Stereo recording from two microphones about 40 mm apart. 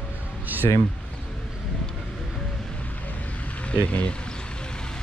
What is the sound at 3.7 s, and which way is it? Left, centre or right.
Speech, left.